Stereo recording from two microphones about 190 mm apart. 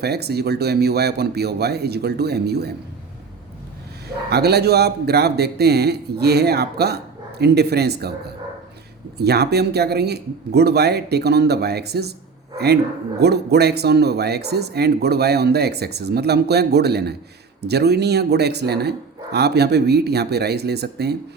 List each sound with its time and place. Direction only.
0.0 s speech: 60° right (ahead or behind)
4.3 s speech: 60° right (ahead or behind)